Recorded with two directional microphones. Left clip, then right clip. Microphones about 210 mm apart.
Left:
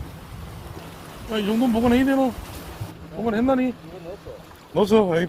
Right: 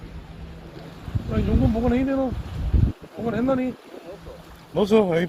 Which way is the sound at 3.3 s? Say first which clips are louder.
Left 2 dB; 20° left (ahead or behind).